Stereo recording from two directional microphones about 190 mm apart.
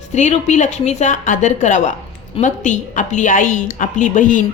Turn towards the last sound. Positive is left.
turn(degrees=40)  # may be behind; listen again after turning